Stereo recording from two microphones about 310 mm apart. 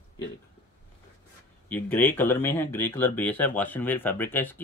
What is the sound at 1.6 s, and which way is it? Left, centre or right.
Speech, centre.